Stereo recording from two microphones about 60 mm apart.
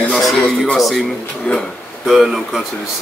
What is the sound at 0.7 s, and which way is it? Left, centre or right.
Speech, centre.